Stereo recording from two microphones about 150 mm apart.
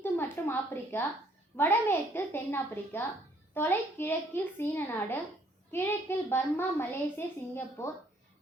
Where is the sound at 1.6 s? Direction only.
15° left (ahead or behind).